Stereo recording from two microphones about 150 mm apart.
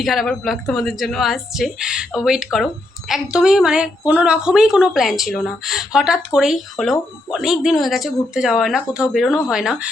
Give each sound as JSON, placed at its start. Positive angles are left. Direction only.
{"t": 0.0, "sound": "a woman's voice", "side_deg": 0}